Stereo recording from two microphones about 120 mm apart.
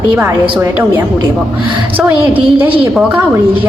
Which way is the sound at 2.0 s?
15° right (ahead or behind).